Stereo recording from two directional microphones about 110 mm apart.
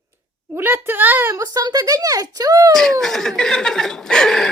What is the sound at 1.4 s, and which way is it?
Speech, 35° right (ahead or behind).